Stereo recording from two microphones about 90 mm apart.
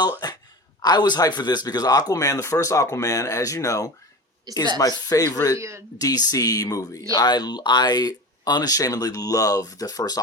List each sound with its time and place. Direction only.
0.2 s a sound: 50° left (ahead or behind)
0.8 s a man's voice: 50° left (ahead or behind)
4.5 s speech: 45° right (ahead or behind)
4.8 s speech: 45° left (ahead or behind)
5.5 s speech: 30° right (ahead or behind)
6.0 s speech: 40° left (ahead or behind)
7.1 s speech: 50° left (ahead or behind)